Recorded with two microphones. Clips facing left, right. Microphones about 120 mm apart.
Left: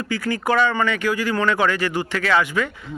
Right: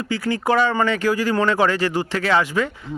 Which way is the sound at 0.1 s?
25° right (ahead or behind).